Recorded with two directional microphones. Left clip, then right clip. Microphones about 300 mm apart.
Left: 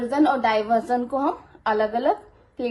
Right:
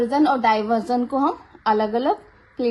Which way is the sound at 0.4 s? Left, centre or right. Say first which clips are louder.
Right 1 dB; right.